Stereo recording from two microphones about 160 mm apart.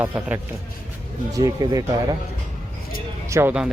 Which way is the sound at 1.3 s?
25° right (ahead or behind).